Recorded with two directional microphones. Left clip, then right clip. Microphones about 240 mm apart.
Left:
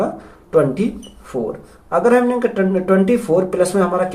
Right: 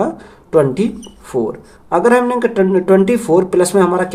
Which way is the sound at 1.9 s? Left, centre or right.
Right.